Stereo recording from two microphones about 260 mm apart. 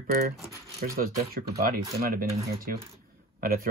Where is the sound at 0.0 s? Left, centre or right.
Right.